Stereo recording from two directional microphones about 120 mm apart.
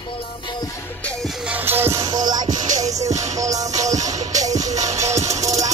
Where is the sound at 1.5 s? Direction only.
20° right (ahead or behind).